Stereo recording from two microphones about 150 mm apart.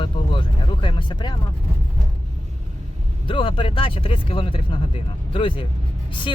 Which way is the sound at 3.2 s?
35° left (ahead or behind).